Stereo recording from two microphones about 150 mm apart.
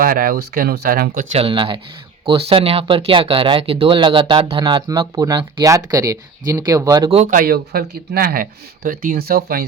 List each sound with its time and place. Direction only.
0.0 s speech: 70° right (ahead or behind)
1.4 s speech: 35° right (ahead or behind)
7.3 s speech: 70° right (ahead or behind); by 9.6 s 90° right